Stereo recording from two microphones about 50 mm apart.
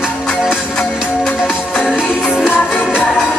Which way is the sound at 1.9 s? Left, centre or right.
Centre.